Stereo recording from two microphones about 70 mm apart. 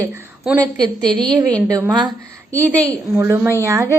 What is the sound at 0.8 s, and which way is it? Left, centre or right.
Speech, right.